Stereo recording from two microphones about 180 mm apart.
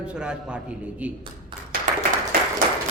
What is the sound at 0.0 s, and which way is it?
A man's voice, 5° right (ahead or behind).